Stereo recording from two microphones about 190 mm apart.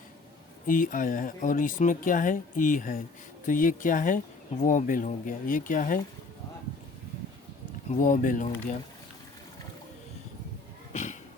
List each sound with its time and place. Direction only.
0.7 s speech: 45° left (ahead or behind)
7.9 s speech: 40° left (ahead or behind)
10.9 s a sound: 40° left (ahead or behind)